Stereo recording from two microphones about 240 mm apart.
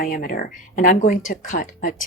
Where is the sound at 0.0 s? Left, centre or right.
Left.